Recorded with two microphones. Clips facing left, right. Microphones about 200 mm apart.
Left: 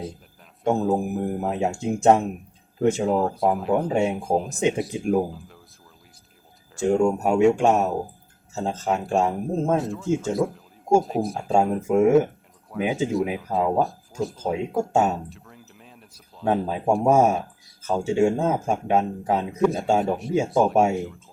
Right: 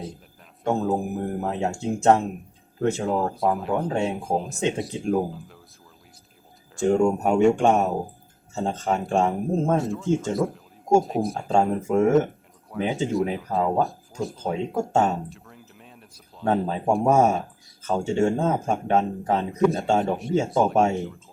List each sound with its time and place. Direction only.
1.4 s speech: 15° left (ahead or behind)
3.1 s speech: centre (ahead or behind)
3.8 s speech: 25° left (ahead or behind)
4.1 s speech: centre (ahead or behind)
4.9 s speech: 25° right (ahead or behind)
5.1 s speech: centre (ahead or behind)
6.7 s speech: centre (ahead or behind)